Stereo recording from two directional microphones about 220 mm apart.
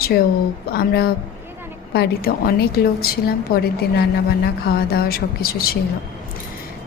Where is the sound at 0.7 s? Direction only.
45° left (ahead or behind).